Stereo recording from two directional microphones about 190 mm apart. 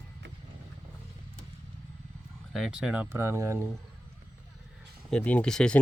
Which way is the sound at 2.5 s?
5° right (ahead or behind).